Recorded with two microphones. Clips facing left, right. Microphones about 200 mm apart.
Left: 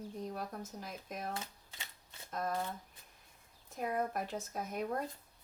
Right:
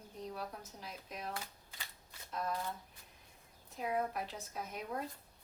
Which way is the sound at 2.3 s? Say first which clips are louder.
Left 2 dB; 50° left (ahead or behind).